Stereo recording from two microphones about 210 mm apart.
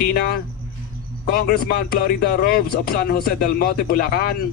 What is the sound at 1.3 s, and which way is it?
A man's voice, 45° left (ahead or behind).